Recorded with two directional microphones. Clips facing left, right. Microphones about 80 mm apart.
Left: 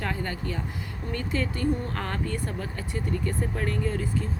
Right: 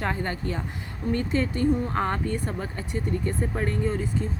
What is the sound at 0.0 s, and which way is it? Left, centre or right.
Speech, right.